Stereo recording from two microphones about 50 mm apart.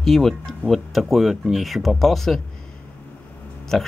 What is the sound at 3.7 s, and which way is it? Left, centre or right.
Speech, centre.